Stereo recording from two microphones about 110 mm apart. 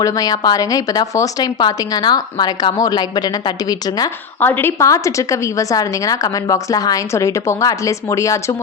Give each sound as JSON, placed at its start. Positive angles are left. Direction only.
{"t": 0.0, "sound": "a woman's voice", "side_deg": 35}
{"t": 4.4, "sound": "a woman's voice", "side_deg": 20}